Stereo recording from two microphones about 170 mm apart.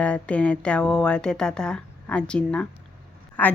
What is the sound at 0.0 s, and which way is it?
Speech, 10° left (ahead or behind).